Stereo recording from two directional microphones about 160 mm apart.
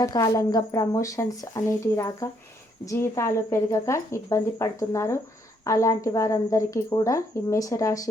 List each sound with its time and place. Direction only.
0.0 s speech: 25° left (ahead or behind)